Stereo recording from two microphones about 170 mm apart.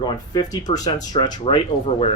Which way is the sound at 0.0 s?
25° left (ahead or behind).